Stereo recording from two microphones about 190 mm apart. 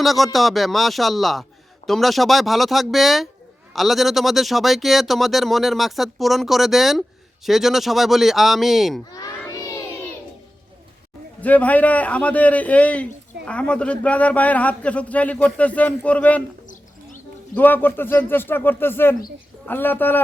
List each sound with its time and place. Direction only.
0.0 s speech: centre (ahead or behind)
9.1 s a sound: 20° left (ahead or behind)
11.3 s a man's voice: 10° left (ahead or behind)
17.5 s a man's voice: 10° left (ahead or behind)